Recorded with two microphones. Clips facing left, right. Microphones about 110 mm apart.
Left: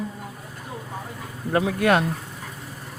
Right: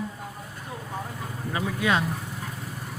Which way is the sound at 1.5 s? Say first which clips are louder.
Left 6 dB; 60° left (ahead or behind).